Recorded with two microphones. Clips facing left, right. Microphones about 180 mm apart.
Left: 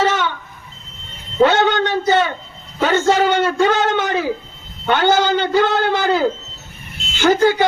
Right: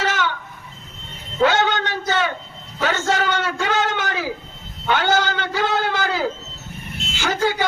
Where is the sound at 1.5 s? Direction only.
60° left (ahead or behind).